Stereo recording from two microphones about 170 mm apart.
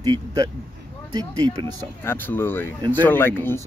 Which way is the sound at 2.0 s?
10° left (ahead or behind).